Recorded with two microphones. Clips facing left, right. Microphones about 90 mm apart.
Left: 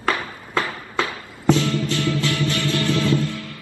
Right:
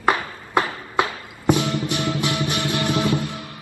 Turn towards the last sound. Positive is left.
turn(degrees=-20)  # may be behind; listen again after turning